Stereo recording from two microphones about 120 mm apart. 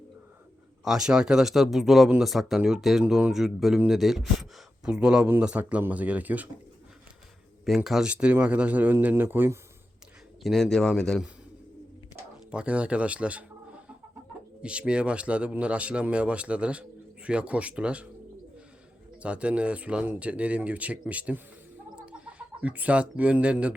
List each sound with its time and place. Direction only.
0.9 s a man's voice: 5° right (ahead or behind)
7.6 s a man's voice: centre (ahead or behind); by 9.6 s 15° right (ahead or behind)
10.4 s speech: centre (ahead or behind)
12.5 s a man's voice: 10° right (ahead or behind)
19.2 s a man's voice: 10° right (ahead or behind)